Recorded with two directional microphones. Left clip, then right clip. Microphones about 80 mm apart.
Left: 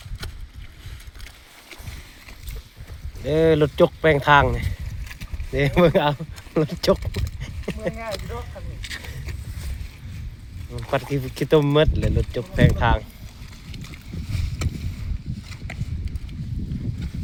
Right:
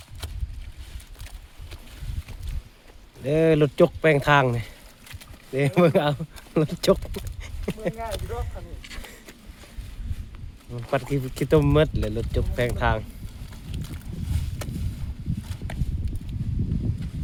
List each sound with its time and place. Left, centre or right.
3.2 s speech: right
5.5 s speech: right
10.7 s speech: right